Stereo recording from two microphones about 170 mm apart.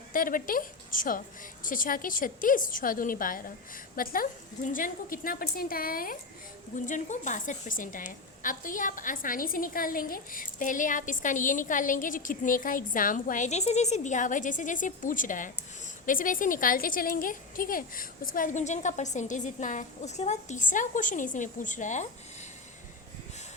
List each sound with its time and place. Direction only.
0.1 s a woman's voice: 55° left (ahead or behind)